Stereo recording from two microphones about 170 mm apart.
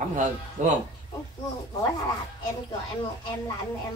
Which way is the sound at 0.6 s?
50° right (ahead or behind).